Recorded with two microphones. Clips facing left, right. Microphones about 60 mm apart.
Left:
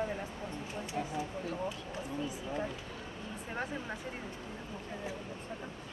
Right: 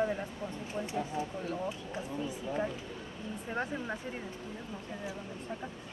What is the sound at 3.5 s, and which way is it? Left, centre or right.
Speech, centre.